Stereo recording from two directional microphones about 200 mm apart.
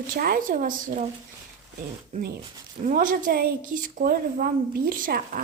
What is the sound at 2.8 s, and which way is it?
A woman's voice, 40° right (ahead or behind).